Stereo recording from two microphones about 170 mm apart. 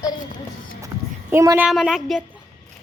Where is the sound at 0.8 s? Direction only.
15° right (ahead or behind).